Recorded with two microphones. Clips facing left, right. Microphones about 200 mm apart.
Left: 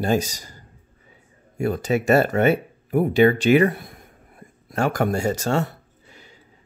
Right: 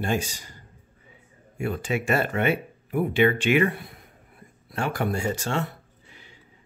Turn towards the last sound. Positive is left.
turn(degrees=40)  # may be behind; listen again after turning